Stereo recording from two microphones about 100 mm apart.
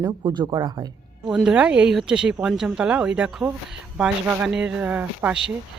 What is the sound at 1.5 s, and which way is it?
Speech, 10° right (ahead or behind).